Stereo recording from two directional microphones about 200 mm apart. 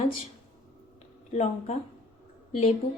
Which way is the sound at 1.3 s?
35° left (ahead or behind).